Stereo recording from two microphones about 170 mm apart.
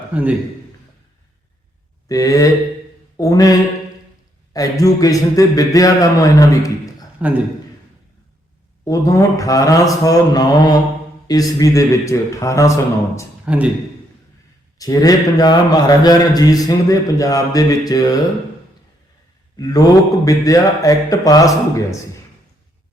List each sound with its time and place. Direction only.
0.1 s a man's voice: 10° right (ahead or behind)
2.0 s a man's voice: 20° left (ahead or behind)
4.5 s a man's voice: 20° left (ahead or behind)
7.2 s a man's voice: 10° right (ahead or behind)
8.8 s a man's voice: 20° left (ahead or behind)
13.4 s a man's voice: 10° right (ahead or behind)
14.8 s a man's voice: 20° left (ahead or behind)
19.5 s a man's voice: 20° left (ahead or behind)